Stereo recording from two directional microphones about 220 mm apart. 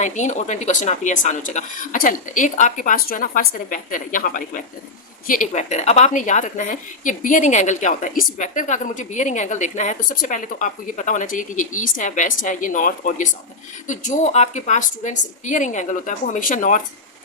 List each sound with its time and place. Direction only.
0.0 s a woman's voice: 35° left (ahead or behind)